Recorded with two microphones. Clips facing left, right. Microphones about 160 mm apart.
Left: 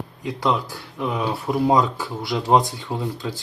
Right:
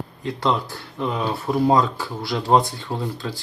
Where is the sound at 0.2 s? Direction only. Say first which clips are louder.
Even; 10° left (ahead or behind).